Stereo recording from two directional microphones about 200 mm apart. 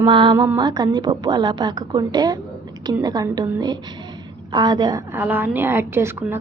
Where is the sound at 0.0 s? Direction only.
25° right (ahead or behind).